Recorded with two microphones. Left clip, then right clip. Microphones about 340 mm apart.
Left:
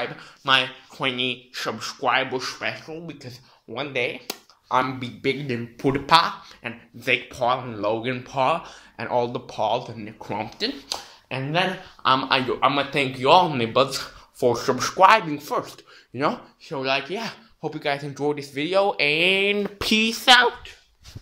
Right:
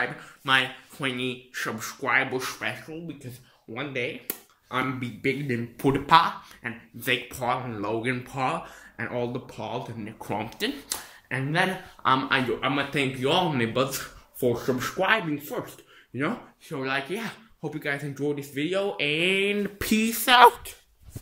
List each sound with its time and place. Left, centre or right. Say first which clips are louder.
0.2 s speech: left 5 dB; centre
3.7 s speech: left 5 dB; centre